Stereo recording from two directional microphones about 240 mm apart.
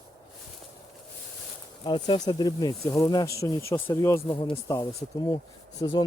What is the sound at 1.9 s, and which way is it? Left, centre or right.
Speech, centre.